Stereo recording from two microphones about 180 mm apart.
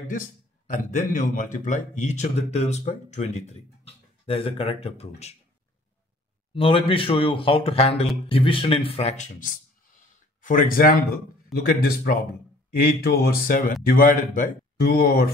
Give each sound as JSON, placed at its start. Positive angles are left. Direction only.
{"t": 0.1, "sound": "a man's voice", "side_deg": 50}
{"t": 6.5, "sound": "a man's voice", "side_deg": 30}